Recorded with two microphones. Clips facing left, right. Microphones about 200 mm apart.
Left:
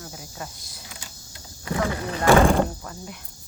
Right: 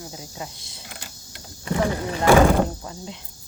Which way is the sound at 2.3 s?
5° right (ahead or behind).